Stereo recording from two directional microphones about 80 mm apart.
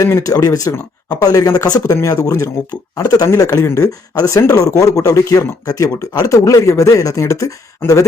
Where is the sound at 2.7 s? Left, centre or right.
Left.